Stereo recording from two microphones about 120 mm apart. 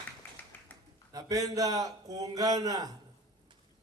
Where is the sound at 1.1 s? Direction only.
30° right (ahead or behind).